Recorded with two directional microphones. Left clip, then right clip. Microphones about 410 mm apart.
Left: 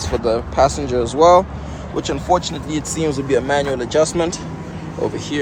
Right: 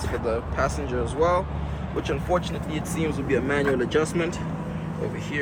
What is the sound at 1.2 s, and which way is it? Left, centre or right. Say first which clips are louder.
Speech: left 12 dB; centre.